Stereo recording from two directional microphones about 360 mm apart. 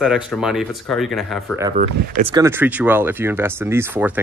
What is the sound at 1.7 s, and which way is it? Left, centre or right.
Speech, centre.